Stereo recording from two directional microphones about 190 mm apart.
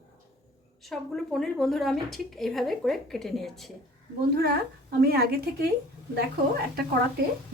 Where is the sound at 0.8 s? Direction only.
Centre (ahead or behind).